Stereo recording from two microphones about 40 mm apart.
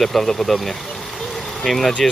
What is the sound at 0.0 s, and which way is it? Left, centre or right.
Speech, centre.